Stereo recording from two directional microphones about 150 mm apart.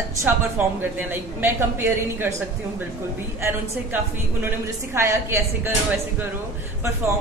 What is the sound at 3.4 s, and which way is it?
A woman's voice, 15° right (ahead or behind).